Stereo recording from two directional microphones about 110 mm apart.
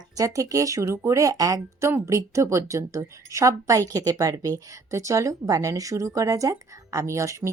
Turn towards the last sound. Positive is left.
turn(degrees=-25)  # may be behind; listen again after turning